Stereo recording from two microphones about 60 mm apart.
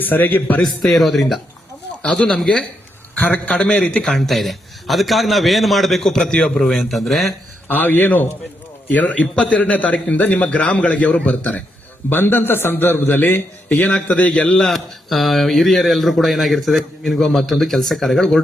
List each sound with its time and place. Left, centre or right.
0.0 s a man's voice: left
0.6 s speech: centre
2.0 s speech: centre
3.2 s a man's voice: left
4.1 s speech: centre
7.7 s a man's voice: left
9.2 s speech: centre
9.5 s a man's voice: left
12.0 s a man's voice: left
13.7 s a man's voice: left
14.7 s speech: centre